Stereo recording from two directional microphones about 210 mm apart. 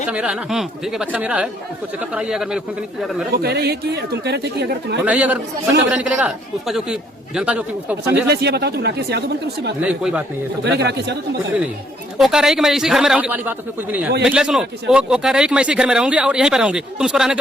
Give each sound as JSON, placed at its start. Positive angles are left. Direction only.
{"t": 0.1, "sound": "speech", "side_deg": -5}
{"t": 3.3, "sound": "speech", "side_deg": -50}
{"t": 5.0, "sound": "speech", "side_deg": -5}
{"t": 8.3, "sound": "speech", "side_deg": -50}
{"t": 9.8, "sound": "speech", "side_deg": -5}
{"t": 10.8, "sound": "speech", "side_deg": -55}
{"t": 12.1, "sound": "speech", "side_deg": 0}